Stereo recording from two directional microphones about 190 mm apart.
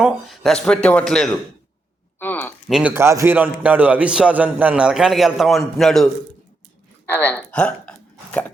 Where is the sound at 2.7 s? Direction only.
Centre (ahead or behind).